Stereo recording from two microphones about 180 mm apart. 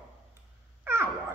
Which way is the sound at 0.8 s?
15° right (ahead or behind).